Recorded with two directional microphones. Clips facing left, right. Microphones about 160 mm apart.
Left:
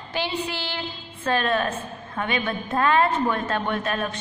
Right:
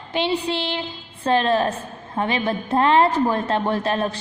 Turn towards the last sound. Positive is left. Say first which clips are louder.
# right 4 dB
turn(degrees=-30)  # may be behind; listen again after turning